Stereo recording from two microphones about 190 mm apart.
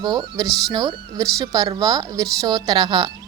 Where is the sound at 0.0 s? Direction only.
20° right (ahead or behind).